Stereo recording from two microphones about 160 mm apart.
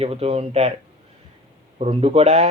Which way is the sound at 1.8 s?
40° right (ahead or behind).